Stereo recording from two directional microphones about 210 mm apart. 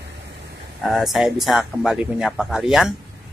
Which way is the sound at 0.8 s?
Centre (ahead or behind).